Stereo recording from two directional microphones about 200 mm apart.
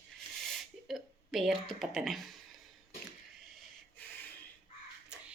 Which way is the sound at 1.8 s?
Centre (ahead or behind).